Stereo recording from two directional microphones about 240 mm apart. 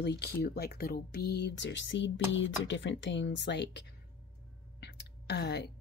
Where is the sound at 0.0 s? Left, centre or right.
Left.